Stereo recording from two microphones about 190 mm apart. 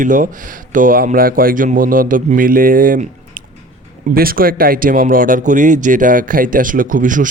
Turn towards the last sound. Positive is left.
turn(degrees=-45)  # may be behind; listen again after turning